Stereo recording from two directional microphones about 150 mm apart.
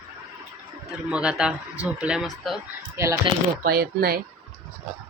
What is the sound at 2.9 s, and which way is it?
Mantra, 20° right (ahead or behind).